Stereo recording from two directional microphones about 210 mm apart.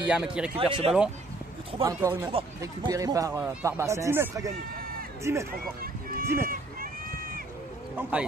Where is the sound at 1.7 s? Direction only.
25° right (ahead or behind).